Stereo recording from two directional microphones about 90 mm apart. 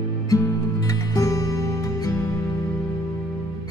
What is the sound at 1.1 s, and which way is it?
Music, 40° left (ahead or behind).